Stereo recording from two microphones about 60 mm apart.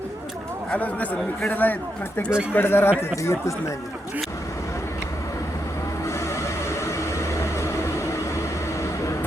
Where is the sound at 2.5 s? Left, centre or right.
Left.